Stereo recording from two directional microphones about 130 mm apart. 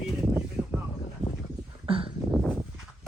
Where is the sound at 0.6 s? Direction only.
Centre (ahead or behind).